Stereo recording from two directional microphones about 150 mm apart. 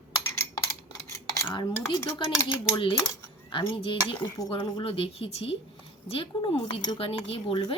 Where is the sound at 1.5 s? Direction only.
30° left (ahead or behind).